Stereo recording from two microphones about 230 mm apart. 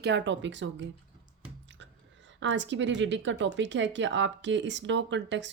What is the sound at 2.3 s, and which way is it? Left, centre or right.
Speech, right.